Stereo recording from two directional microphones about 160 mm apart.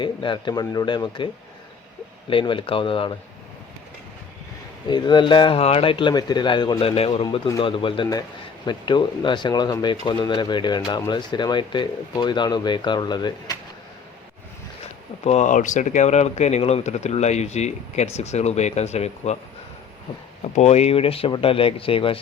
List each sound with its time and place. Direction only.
0.0 s speech: 30° left (ahead or behind)
2.3 s speech: 30° left (ahead or behind)
4.9 s speech: 30° left (ahead or behind)
15.2 s speech: 45° left (ahead or behind)
20.6 s speech: 40° left (ahead or behind)